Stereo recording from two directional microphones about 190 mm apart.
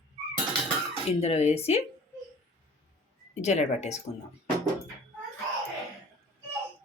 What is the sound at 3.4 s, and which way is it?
Speech, 35° left (ahead or behind).